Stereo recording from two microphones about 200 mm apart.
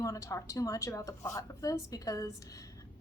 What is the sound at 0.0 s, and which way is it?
A woman's voice, 15° left (ahead or behind).